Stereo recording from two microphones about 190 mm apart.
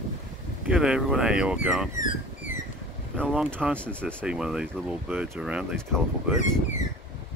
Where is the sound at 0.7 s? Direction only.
5° right (ahead or behind).